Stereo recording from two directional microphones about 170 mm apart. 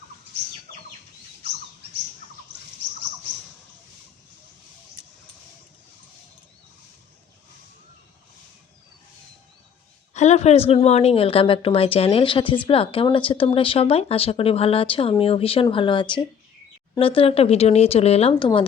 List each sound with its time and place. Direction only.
10.2 s a woman's voice: 40° left (ahead or behind)